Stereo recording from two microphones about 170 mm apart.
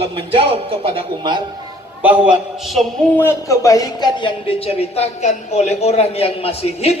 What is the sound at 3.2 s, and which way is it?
Speech, 15° left (ahead or behind).